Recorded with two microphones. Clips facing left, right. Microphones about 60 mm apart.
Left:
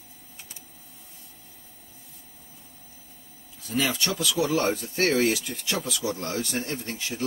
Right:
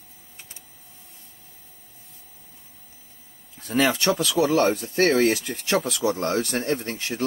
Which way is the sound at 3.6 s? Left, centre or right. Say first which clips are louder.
Right 5 dB; right.